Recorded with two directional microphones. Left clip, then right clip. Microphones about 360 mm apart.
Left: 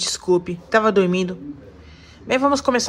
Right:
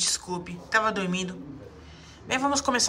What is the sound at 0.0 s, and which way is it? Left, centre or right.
Speech, centre.